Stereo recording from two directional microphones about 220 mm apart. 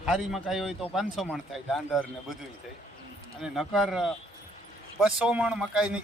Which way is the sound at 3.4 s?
Centre (ahead or behind).